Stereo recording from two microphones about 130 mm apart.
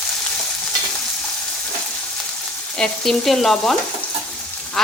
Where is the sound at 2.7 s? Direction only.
5° left (ahead or behind).